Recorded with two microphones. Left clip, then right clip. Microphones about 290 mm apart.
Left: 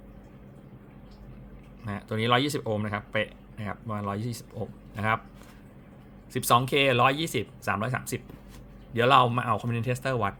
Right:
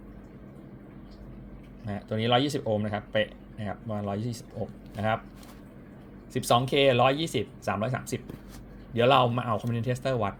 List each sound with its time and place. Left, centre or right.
1.8 s speech: centre
6.3 s speech: centre